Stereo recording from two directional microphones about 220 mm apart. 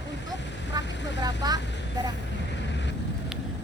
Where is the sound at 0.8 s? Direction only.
55° left (ahead or behind).